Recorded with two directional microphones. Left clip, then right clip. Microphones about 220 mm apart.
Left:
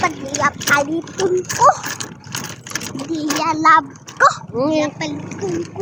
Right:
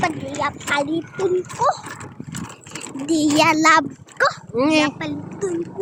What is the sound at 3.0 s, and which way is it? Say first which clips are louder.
Speech: right 4 dB; 30° right (ahead or behind).